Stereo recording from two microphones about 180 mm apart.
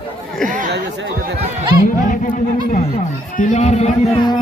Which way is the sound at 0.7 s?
70° right (ahead or behind).